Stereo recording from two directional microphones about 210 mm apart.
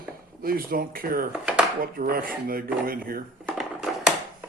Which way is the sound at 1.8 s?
45° right (ahead or behind).